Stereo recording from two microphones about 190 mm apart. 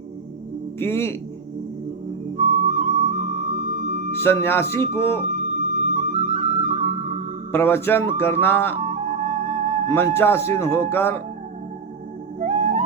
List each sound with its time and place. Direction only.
0.8 s speech: 10° left (ahead or behind)
2.4 s music: 40° right (ahead or behind)
4.2 s speech: 10° left (ahead or behind)
5.6 s flute: 40° right (ahead or behind)
7.5 s speech: 10° left (ahead or behind)
8.8 s music: 35° right (ahead or behind)
9.9 s speech: 10° left (ahead or behind)
12.4 s theremin: 40° right (ahead or behind)